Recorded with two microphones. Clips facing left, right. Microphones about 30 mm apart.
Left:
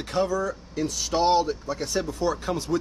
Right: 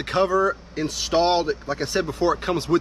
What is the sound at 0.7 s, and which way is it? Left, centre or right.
Speech, right.